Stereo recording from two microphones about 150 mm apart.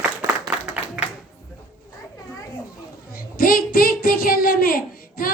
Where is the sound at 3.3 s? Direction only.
75° left (ahead or behind).